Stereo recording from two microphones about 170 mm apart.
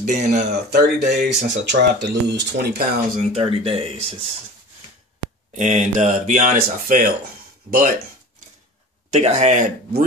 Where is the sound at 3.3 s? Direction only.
35° right (ahead or behind).